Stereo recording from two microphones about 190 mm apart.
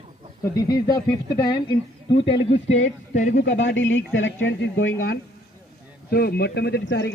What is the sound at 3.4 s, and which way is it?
Speech, 75° left (ahead or behind).